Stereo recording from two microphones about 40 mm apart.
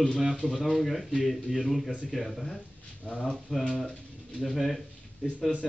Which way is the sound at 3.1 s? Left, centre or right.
Centre.